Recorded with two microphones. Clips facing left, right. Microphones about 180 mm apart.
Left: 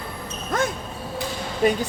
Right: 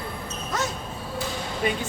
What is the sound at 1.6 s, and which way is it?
Speech, 45° left (ahead or behind).